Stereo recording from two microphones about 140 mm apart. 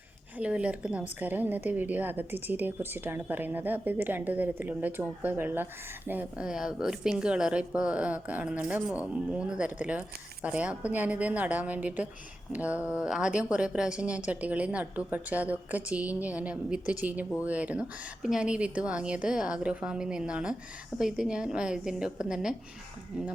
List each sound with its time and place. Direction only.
0.3 s a woman's voice: 10° right (ahead or behind)